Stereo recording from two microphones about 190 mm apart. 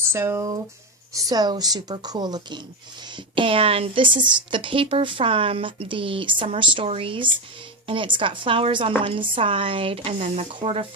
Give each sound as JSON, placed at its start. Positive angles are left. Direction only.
{"t": 0.1, "sound": "a woman's voice", "side_deg": -15}